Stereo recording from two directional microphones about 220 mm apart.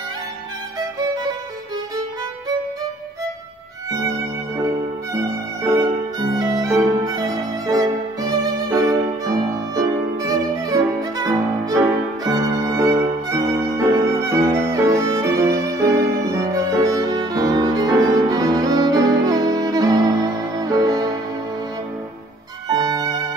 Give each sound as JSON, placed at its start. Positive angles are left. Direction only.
{"t": 0.7, "sound": "music", "side_deg": -15}
{"t": 4.6, "sound": "violin", "side_deg": -10}
{"t": 22.7, "sound": "music", "side_deg": -15}